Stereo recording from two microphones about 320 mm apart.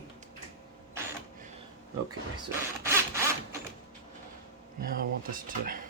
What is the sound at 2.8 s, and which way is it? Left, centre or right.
Zipper, centre.